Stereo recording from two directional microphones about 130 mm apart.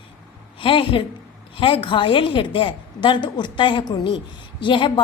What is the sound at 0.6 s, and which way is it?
A woman's voice, 45° left (ahead or behind).